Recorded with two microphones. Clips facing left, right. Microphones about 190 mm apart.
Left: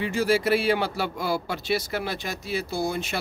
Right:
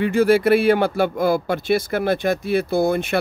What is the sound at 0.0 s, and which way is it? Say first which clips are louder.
Speech: right 7 dB; 55° right (ahead or behind).